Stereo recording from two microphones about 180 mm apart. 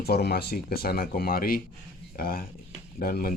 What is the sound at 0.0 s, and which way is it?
A man's voice, 60° left (ahead or behind).